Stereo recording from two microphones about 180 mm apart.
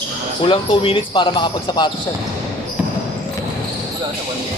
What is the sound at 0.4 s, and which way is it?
Speech, 30° left (ahead or behind).